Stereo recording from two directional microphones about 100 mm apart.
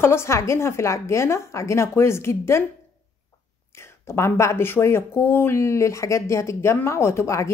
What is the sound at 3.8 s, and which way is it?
Speech, 25° left (ahead or behind).